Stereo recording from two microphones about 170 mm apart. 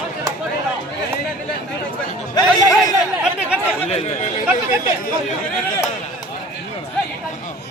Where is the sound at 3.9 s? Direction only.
40° left (ahead or behind).